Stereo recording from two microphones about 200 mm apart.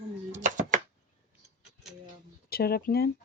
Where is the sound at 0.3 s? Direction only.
40° right (ahead or behind).